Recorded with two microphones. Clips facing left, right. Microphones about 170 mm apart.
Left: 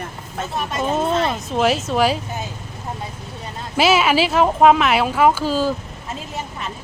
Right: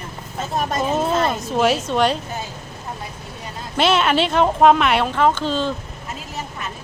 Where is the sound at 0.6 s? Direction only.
40° right (ahead or behind).